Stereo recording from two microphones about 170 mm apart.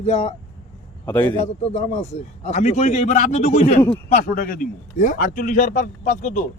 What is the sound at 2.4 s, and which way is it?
A man's voice, 45° left (ahead or behind).